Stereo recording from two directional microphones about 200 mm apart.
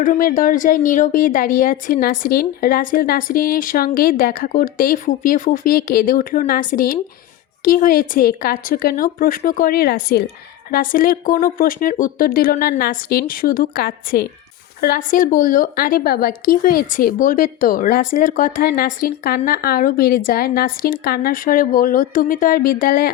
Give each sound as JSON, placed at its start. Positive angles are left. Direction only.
{"t": 0.0, "sound": "a woman's voice", "side_deg": 40}